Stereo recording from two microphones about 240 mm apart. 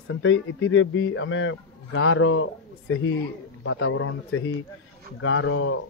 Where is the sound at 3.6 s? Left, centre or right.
Left.